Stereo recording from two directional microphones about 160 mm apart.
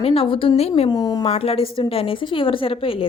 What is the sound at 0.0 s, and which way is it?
Speech, 35° left (ahead or behind).